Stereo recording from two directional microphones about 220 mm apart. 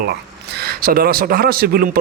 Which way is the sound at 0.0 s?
45° right (ahead or behind).